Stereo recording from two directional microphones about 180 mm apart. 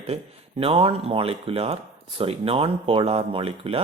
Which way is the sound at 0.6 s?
30° right (ahead or behind).